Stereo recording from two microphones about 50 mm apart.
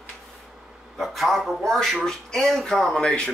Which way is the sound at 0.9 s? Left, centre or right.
Centre.